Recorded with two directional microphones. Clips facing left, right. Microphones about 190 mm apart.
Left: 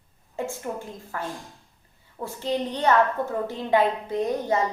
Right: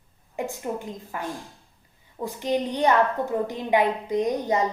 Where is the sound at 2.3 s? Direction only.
15° right (ahead or behind).